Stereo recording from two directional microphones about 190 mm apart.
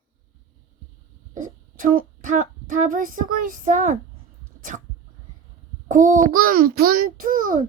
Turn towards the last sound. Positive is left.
turn(degrees=-45)  # may be behind; listen again after turning